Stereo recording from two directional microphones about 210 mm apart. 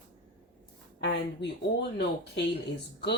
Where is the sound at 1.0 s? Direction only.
55° left (ahead or behind).